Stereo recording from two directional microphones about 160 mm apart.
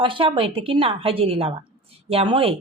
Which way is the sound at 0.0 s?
35° right (ahead or behind).